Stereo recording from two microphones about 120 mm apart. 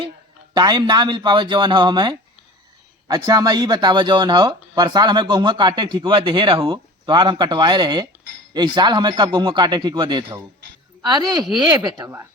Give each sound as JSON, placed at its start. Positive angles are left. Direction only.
{"t": 0.5, "sound": "speech", "side_deg": -35}